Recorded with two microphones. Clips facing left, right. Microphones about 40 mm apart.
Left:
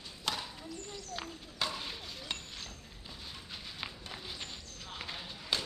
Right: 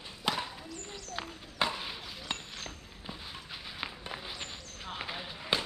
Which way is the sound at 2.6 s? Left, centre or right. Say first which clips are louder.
Right 3 dB; right.